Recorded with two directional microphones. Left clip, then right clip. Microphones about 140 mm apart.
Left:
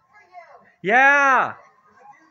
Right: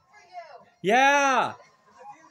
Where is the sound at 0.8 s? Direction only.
20° right (ahead or behind).